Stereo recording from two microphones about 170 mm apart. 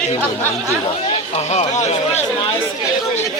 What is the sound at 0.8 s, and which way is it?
Speech, 35° left (ahead or behind).